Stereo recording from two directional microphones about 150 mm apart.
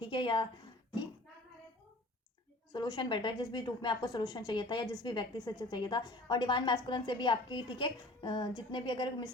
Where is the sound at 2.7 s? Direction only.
30° left (ahead or behind).